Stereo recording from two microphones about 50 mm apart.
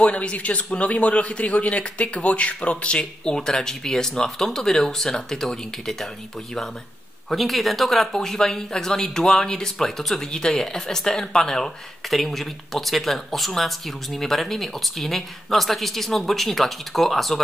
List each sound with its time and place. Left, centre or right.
0.0 s a man's voice: left
7.2 s a man's voice: centre